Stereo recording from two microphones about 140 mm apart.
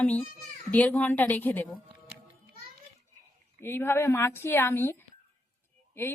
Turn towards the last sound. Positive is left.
turn(degrees=15)  # may be behind; listen again after turning